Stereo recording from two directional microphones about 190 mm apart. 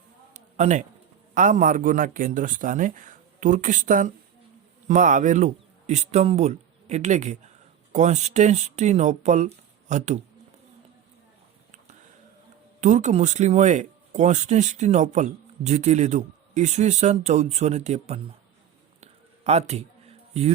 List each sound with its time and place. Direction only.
0.3 s a sound: 40° right (ahead or behind)
1.3 s a man's voice: 45° right (ahead or behind)
12.8 s speech: 40° right (ahead or behind)
19.5 s speech: 35° right (ahead or behind)